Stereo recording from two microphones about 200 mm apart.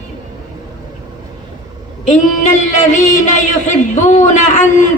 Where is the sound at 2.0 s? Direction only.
35° left (ahead or behind).